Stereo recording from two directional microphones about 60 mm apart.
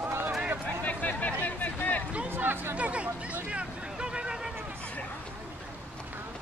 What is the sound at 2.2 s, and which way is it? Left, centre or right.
Chatter, right.